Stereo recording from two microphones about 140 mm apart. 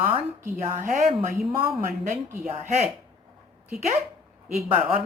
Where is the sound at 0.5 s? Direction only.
65° right (ahead or behind).